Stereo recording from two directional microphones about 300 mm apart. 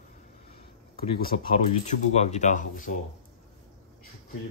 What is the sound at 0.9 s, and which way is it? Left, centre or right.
A man's voice, left.